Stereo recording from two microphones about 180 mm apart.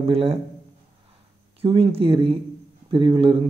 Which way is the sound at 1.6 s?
30° right (ahead or behind).